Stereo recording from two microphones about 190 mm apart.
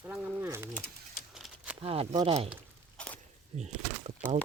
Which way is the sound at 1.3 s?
5° right (ahead or behind).